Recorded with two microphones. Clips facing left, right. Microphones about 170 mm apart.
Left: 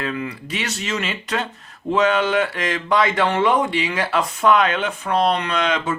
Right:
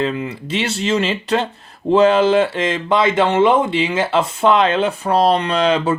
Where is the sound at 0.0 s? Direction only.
25° right (ahead or behind).